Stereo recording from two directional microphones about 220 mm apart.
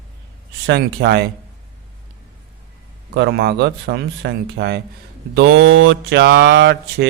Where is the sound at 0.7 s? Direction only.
50° right (ahead or behind).